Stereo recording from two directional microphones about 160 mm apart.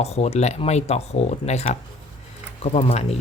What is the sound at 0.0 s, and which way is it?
Speech, 40° left (ahead or behind).